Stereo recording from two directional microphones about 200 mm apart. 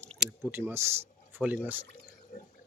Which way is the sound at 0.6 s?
25° left (ahead or behind).